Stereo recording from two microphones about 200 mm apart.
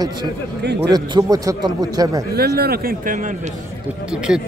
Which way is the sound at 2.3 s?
50° right (ahead or behind).